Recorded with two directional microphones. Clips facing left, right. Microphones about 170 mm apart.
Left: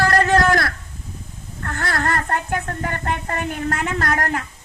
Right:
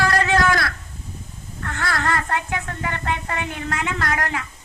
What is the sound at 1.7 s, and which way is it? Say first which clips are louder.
Speech: left 1 dB; 45° left (ahead or behind).